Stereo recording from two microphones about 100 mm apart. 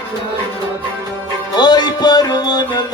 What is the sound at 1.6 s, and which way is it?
Music, 45° left (ahead or behind).